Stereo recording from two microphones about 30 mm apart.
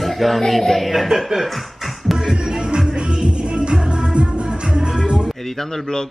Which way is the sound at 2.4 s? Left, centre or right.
Centre.